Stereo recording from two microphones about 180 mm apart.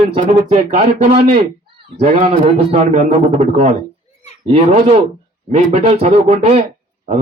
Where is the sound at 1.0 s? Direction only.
30° right (ahead or behind).